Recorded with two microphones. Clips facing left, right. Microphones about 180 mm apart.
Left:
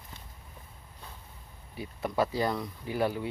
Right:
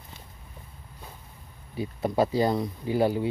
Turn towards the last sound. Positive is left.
turn(degrees=-25)  # may be behind; listen again after turning